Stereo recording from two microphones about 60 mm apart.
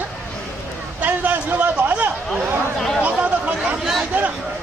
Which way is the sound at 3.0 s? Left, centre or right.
Right.